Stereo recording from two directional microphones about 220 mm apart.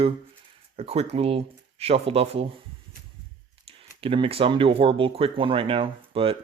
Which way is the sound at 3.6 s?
25° right (ahead or behind).